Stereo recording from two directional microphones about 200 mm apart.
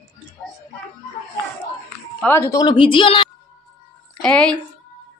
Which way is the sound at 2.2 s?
15° left (ahead or behind).